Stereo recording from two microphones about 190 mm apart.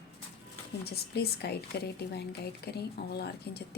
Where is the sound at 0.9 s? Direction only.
60° left (ahead or behind).